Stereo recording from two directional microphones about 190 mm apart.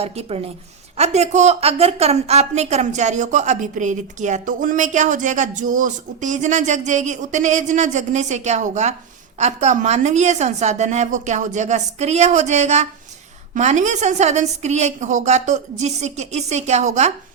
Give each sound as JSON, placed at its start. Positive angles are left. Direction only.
{"t": 0.0, "sound": "a woman's voice", "side_deg": -30}